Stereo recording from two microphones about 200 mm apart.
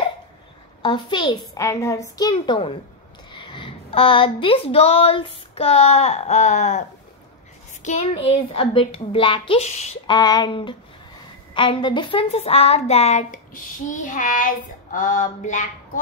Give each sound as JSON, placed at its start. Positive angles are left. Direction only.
{"t": 0.8, "sound": "a child's voice", "side_deg": 25}
{"t": 10.1, "sound": "a child's voice", "side_deg": 20}